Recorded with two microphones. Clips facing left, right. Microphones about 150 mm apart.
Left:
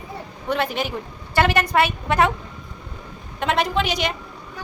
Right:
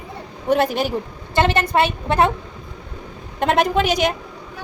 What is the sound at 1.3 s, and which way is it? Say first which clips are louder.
Speech: right 1 dB; 25° right (ahead or behind).